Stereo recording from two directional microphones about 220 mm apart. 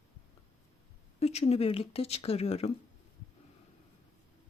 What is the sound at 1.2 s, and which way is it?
Speech, 30° left (ahead or behind).